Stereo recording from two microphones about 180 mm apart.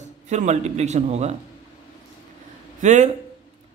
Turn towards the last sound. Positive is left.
turn(degrees=-40)  # may be behind; listen again after turning